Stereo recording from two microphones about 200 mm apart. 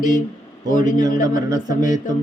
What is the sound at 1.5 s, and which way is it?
Speech, 20° right (ahead or behind).